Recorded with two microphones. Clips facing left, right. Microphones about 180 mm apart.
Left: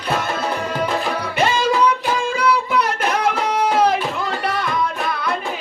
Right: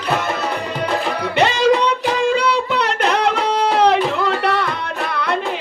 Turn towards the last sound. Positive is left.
turn(degrees=-65)  # may be behind; listen again after turning